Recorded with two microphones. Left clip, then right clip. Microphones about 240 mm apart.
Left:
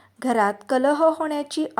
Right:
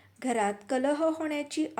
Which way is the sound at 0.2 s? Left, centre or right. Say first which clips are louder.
Left 8 dB; left.